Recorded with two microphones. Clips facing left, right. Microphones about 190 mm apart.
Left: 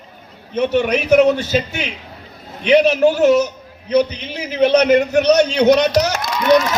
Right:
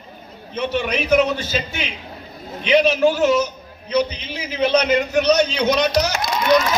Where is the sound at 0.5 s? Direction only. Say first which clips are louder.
Left 6 dB; 55° left (ahead or behind).